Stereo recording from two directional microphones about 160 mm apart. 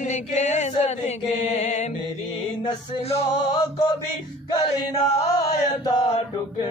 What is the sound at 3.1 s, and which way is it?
Chant, 35° left (ahead or behind).